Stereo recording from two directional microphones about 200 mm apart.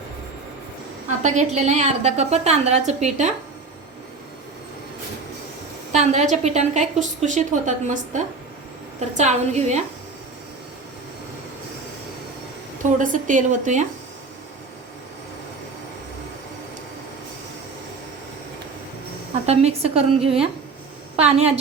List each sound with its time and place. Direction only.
1.2 s a woman's voice: 35° right (ahead or behind)
5.9 s a woman's voice: 35° right (ahead or behind)
12.8 s a woman's voice: 40° right (ahead or behind)
19.5 s a woman's voice: 30° right (ahead or behind)